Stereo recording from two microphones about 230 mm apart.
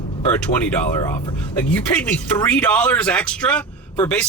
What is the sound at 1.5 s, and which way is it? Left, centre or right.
Speech, centre.